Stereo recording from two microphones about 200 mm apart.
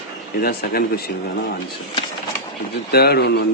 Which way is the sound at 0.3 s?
50° left (ahead or behind).